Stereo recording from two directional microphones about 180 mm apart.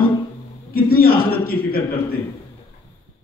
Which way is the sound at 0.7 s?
55° left (ahead or behind).